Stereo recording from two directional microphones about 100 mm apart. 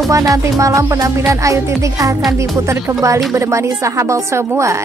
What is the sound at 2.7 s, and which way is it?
A woman's voice, 30° right (ahead or behind).